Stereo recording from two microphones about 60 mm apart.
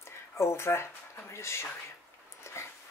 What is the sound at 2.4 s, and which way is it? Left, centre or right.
Dog, left.